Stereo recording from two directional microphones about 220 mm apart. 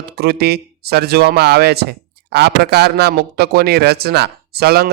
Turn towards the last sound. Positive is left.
turn(degrees=-45)  # may be behind; listen again after turning